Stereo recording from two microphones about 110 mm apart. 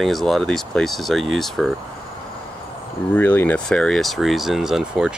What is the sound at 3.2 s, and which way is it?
Speech, 20° left (ahead or behind).